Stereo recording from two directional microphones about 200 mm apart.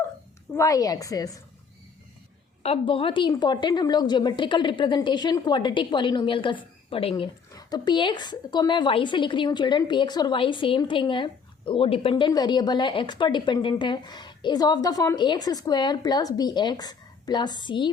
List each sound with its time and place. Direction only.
0.5 s a woman's voice: 15° left (ahead or behind)
2.6 s speech: 25° left (ahead or behind)